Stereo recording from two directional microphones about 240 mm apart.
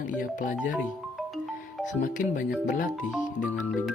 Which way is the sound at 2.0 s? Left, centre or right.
Left.